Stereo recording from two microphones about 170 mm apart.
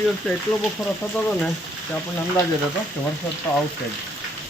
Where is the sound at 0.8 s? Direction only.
Centre (ahead or behind).